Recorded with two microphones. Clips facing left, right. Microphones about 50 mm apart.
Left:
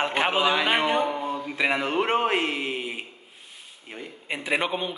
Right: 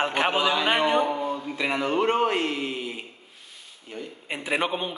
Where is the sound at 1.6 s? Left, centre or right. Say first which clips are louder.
Even; centre.